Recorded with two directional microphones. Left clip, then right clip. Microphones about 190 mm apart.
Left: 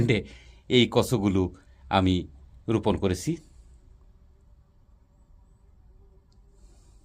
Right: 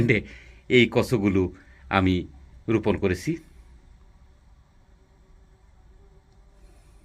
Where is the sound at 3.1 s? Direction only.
90° left.